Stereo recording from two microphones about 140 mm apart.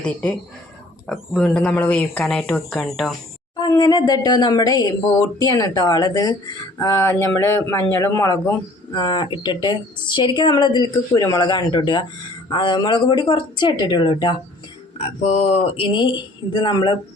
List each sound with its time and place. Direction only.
0.0 s speech: 5° left (ahead or behind)
3.6 s speech: 30° left (ahead or behind)
15.0 s speech: 45° left (ahead or behind); by 17.0 s 30° left (ahead or behind)